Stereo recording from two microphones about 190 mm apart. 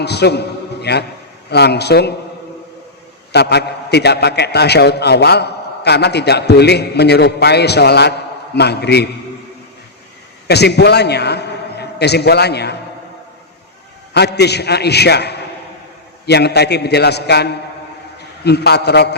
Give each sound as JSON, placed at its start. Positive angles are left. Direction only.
{"t": 0.0, "sound": "a man's voice", "side_deg": 60}
{"t": 3.3, "sound": "a man's voice", "side_deg": 60}
{"t": 10.4, "sound": "a man's voice", "side_deg": 60}
{"t": 14.1, "sound": "a man's voice", "side_deg": 60}